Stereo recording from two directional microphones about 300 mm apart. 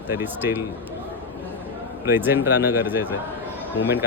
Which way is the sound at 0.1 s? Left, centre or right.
Centre.